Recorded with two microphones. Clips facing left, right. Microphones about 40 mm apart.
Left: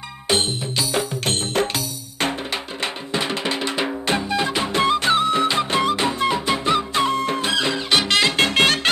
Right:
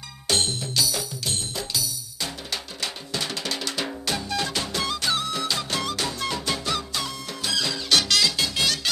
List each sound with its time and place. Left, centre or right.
0.3 s music: left
0.9 s music: left
2.8 s music: left